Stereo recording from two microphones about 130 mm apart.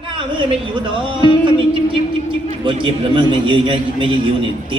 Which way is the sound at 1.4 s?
40° right (ahead or behind).